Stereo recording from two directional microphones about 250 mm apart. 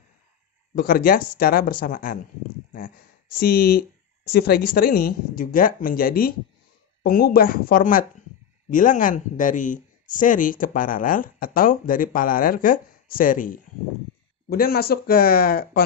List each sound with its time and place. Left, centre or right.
0.7 s speech: left
3.3 s speech: left